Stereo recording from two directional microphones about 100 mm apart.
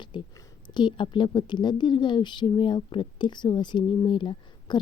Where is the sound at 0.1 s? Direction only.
50° left (ahead or behind).